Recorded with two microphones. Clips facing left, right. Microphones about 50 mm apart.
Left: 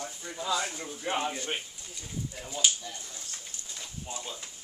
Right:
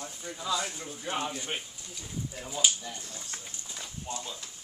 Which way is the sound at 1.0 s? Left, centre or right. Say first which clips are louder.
Left 2 dB; left.